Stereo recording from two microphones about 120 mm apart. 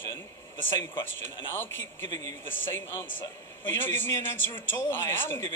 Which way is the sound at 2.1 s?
30° left (ahead or behind).